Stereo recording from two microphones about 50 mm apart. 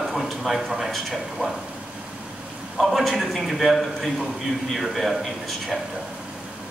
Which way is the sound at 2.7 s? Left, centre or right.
Centre.